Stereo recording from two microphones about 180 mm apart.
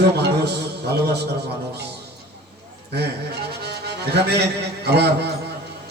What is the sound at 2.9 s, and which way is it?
A man's voice, 65° right (ahead or behind).